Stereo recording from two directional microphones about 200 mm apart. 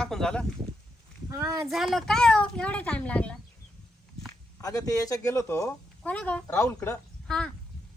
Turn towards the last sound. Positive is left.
turn(degrees=5)  # may be behind; listen again after turning